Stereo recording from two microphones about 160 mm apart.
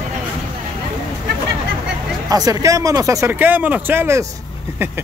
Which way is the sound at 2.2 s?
20° right (ahead or behind).